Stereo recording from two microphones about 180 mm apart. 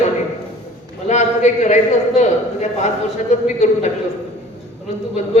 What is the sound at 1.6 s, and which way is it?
A man's voice, 40° left (ahead or behind).